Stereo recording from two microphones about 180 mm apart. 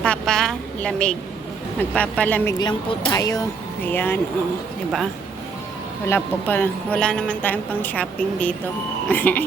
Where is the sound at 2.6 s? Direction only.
25° left (ahead or behind).